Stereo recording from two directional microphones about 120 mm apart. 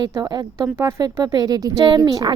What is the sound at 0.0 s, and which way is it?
A woman's voice, 35° right (ahead or behind).